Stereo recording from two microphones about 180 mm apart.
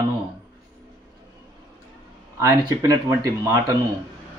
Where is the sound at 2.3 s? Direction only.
15° right (ahead or behind).